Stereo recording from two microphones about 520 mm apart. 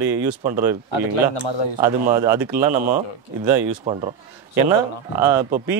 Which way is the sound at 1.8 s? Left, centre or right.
Centre.